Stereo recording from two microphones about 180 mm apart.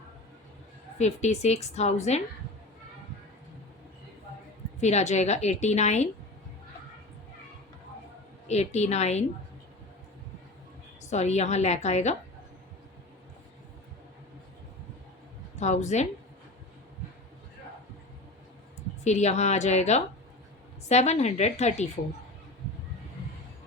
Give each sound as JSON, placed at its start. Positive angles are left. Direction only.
{"t": 0.9, "sound": "a woman's voice", "side_deg": 40}
{"t": 4.8, "sound": "a woman's voice", "side_deg": 40}
{"t": 8.4, "sound": "a woman's voice", "side_deg": 40}
{"t": 11.1, "sound": "a woman's voice", "side_deg": 40}
{"t": 15.5, "sound": "a woman's voice", "side_deg": 40}
{"t": 19.0, "sound": "a woman's voice", "side_deg": 40}